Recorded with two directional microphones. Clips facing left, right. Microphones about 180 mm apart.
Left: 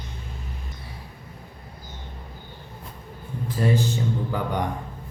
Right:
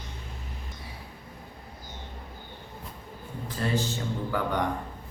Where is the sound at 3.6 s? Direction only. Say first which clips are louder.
Left 6 dB; 15° left (ahead or behind).